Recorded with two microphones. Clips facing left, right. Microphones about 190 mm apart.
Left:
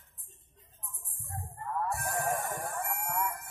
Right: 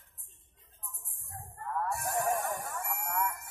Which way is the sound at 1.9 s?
55° left (ahead or behind).